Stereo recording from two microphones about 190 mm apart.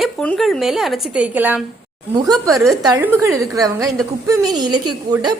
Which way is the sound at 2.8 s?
15° right (ahead or behind).